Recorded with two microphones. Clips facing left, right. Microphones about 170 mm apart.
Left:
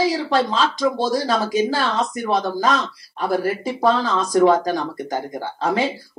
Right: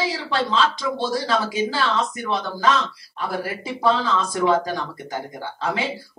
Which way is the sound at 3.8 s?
40° left (ahead or behind).